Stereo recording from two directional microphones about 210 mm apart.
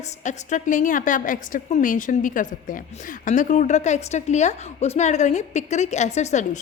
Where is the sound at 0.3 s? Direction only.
35° left (ahead or behind).